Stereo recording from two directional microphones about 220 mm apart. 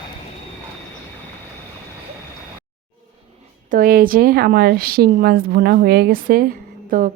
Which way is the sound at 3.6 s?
40° right (ahead or behind).